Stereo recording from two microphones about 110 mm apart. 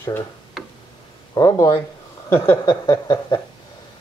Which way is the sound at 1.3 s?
30° left (ahead or behind).